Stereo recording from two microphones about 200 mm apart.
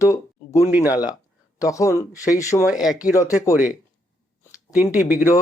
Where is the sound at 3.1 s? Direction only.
15° left (ahead or behind).